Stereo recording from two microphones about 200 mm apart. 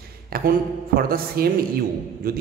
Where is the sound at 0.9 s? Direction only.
50° right (ahead or behind).